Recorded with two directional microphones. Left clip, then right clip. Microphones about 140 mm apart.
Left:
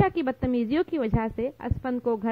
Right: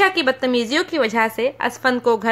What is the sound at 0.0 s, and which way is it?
A woman's voice, 40° left (ahead or behind).